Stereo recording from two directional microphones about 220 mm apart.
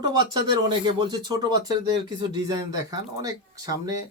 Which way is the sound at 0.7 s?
20° right (ahead or behind).